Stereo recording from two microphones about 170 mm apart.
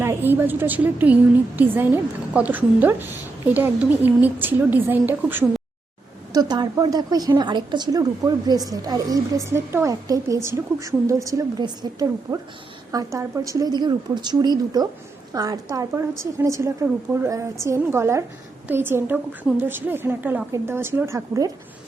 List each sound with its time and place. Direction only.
0.0 s a woman's voice: 15° right (ahead or behind)
6.3 s a woman's voice: 25° right (ahead or behind)